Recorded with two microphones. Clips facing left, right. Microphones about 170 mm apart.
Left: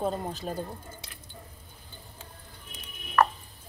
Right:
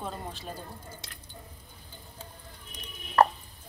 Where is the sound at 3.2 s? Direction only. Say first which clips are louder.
Right 2 dB; 35° right (ahead or behind).